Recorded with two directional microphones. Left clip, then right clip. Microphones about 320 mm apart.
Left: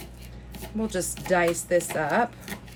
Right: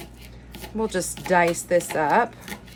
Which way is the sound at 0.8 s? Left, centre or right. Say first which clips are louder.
Right 4 dB; right.